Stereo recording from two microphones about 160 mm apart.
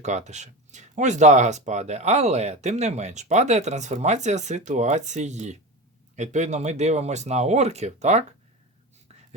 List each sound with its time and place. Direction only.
0.0 s speech: 45° right (ahead or behind)